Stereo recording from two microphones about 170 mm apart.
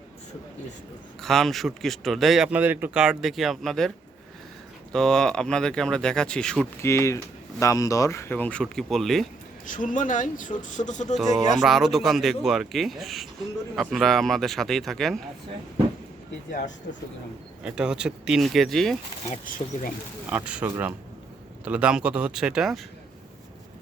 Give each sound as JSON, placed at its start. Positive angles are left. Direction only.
{"t": 1.2, "sound": "speech", "side_deg": 0}
{"t": 6.8, "sound": "speech", "side_deg": 15}
{"t": 9.6, "sound": "speech", "side_deg": 50}
{"t": 11.2, "sound": "speech", "side_deg": 0}
{"t": 17.6, "sound": "speech", "side_deg": -5}
{"t": 19.3, "sound": "speech", "side_deg": 50}
{"t": 20.3, "sound": "speech", "side_deg": -5}